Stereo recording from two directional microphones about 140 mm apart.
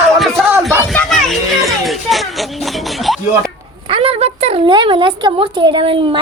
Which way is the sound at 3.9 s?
45° right (ahead or behind).